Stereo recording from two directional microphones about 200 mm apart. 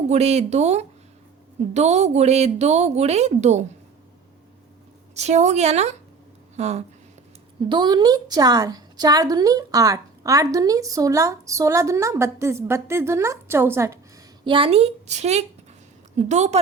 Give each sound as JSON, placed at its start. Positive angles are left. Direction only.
{"t": 0.1, "sound": "a woman's voice", "side_deg": -30}
{"t": 5.1, "sound": "a woman's voice", "side_deg": -35}
{"t": 7.7, "sound": "a woman's voice", "side_deg": -20}
{"t": 14.4, "sound": "a woman's voice", "side_deg": -25}